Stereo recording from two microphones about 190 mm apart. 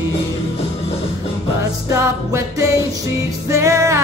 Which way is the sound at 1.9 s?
15° right (ahead or behind).